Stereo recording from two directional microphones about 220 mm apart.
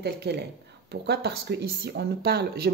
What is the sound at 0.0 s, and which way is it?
Speech, 50° right (ahead or behind).